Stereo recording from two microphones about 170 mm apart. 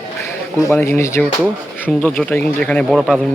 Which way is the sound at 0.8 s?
15° left (ahead or behind).